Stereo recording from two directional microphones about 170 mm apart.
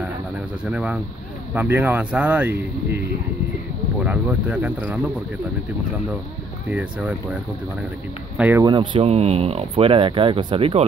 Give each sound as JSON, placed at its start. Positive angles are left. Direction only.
{"t": 0.7, "sound": "speech", "side_deg": -5}
{"t": 4.0, "sound": "speech", "side_deg": -10}
{"t": 6.7, "sound": "speech", "side_deg": -10}
{"t": 8.4, "sound": "speech", "side_deg": -10}
{"t": 8.6, "sound": "speech", "side_deg": -30}